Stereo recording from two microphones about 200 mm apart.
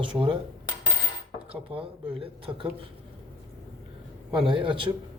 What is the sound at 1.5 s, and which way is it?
Speech, 25° right (ahead or behind).